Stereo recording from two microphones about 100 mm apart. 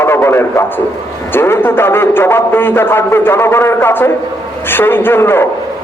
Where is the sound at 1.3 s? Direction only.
20° left (ahead or behind).